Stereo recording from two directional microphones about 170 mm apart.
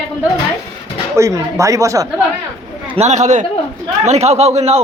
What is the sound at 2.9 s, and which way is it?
A man's voice, 40° right (ahead or behind).